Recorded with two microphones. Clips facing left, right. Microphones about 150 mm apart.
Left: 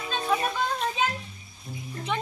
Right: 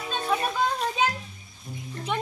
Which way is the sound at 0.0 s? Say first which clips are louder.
Even; centre (ahead or behind).